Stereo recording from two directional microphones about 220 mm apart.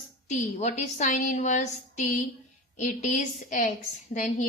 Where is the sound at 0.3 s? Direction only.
35° left (ahead or behind).